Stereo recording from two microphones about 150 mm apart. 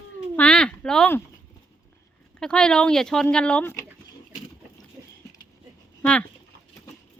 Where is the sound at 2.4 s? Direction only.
5° left (ahead or behind).